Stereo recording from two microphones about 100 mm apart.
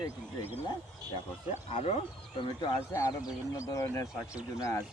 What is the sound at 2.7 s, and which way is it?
Speech, 25° left (ahead or behind).